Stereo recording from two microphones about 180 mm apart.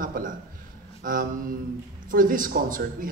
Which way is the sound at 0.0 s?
50° right (ahead or behind).